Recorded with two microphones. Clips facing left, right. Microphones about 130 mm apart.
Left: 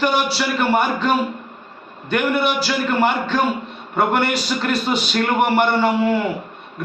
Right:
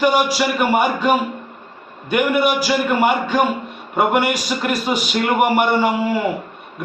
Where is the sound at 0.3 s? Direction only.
10° right (ahead or behind).